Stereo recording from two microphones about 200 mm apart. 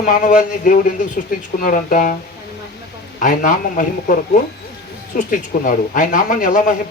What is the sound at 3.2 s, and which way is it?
Speech, 40° left (ahead or behind).